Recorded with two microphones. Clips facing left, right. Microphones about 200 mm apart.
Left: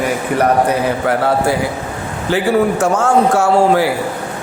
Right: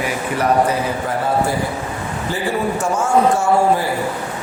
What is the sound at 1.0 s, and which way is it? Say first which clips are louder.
Speech: left 4 dB; 75° left (ahead or behind).